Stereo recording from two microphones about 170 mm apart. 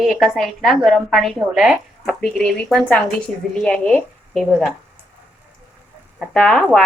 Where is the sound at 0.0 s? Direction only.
Centre (ahead or behind).